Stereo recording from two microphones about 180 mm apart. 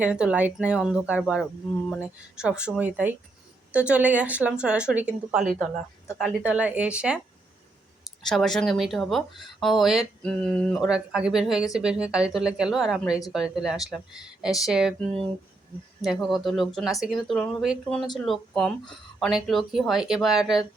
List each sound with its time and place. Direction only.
0.0 s speech: 5° right (ahead or behind)
8.3 s speech: centre (ahead or behind)